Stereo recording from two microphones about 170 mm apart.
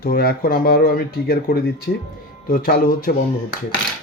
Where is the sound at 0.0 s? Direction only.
65° left (ahead or behind).